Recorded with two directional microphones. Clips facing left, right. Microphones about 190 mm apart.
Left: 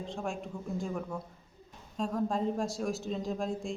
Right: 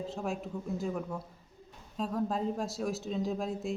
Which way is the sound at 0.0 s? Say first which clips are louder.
Right 1 dB; 5° right (ahead or behind).